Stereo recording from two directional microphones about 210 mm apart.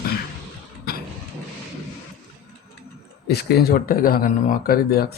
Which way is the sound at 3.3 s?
50° left (ahead or behind).